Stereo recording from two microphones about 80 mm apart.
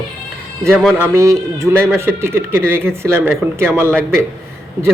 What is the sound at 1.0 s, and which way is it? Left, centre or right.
Speech, right.